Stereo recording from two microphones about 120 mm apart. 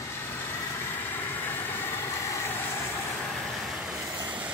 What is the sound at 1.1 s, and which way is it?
Vehicle, 15° left (ahead or behind).